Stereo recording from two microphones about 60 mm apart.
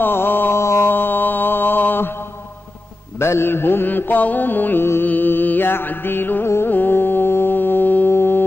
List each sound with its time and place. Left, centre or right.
0.0 s mantra: left
3.2 s mantra: left
6.7 s carnatic music: left
8.1 s music: left